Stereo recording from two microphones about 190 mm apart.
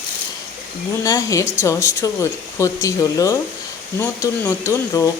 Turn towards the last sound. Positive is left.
turn(degrees=15)  # may be behind; listen again after turning